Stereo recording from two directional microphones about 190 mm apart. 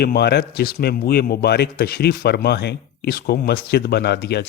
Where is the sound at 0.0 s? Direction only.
60° left (ahead or behind).